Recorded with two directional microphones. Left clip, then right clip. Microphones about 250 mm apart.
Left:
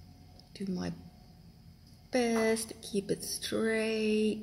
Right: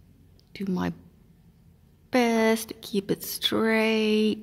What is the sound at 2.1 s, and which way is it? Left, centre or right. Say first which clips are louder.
Speech: right 7 dB; right.